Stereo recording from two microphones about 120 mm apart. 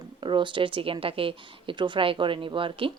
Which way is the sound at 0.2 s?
40° right (ahead or behind).